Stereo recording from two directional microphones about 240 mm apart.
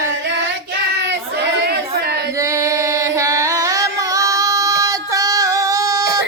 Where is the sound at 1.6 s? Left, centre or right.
Right.